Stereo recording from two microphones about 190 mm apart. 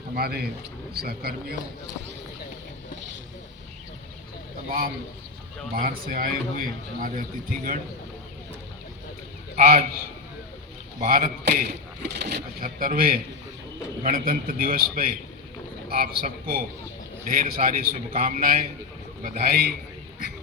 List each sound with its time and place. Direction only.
0.2 s a man's voice: 55° right (ahead or behind)
5.8 s a man's voice: 50° right (ahead or behind)
9.6 s a man's voice: 40° right (ahead or behind)
11.0 s a man's voice: 45° right (ahead or behind)
12.5 s a man's voice: 45° right (ahead or behind)